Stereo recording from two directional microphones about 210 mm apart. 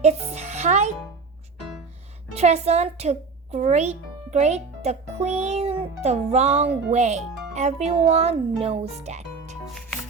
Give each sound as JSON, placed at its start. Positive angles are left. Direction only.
{"t": 0.0, "sound": "music", "side_deg": -30}
{"t": 2.3, "sound": "a child's voice", "side_deg": -30}